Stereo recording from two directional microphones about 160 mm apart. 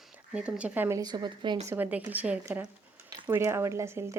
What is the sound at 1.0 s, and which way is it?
Speech, 25° right (ahead or behind).